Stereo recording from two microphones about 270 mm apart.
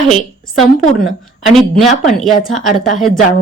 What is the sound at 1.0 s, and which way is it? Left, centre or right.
Speech, left.